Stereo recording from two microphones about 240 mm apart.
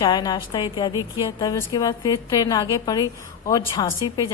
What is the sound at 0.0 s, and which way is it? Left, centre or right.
A woman's voice, centre.